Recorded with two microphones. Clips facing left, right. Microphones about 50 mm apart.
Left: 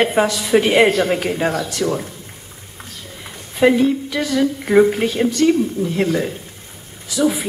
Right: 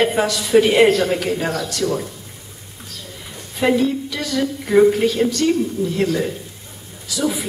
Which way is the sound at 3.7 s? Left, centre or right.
Left.